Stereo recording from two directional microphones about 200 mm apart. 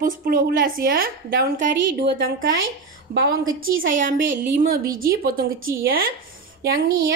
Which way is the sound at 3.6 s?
45° right (ahead or behind).